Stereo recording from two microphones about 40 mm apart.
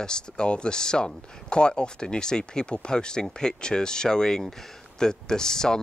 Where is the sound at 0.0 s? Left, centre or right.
Left.